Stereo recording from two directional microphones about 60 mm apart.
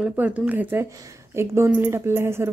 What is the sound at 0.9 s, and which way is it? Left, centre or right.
A woman's voice, right.